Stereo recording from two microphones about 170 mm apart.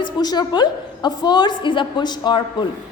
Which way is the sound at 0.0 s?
25° left (ahead or behind).